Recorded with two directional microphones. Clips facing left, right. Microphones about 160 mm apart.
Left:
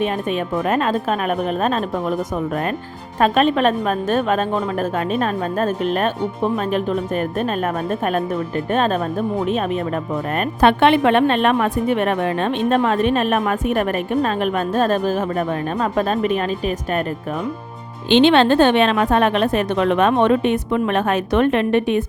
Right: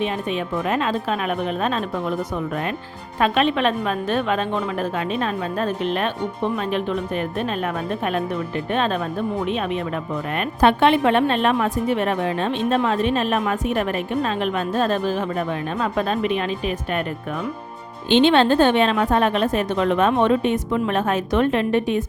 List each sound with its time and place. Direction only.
0.0 s a woman's voice: 50° left (ahead or behind)
10.6 s a woman's voice: 65° left (ahead or behind); by 17.0 s 40° left (ahead or behind)
18.1 s a woman's voice: 75° left (ahead or behind)